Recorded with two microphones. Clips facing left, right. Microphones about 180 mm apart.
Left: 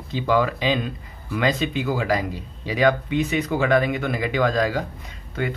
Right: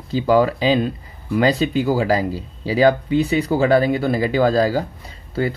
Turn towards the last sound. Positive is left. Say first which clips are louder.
# right 5 dB
turn(degrees=-35)  # may be behind; listen again after turning